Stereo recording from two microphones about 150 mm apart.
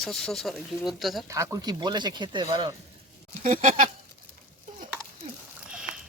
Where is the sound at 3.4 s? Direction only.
60° right (ahead or behind).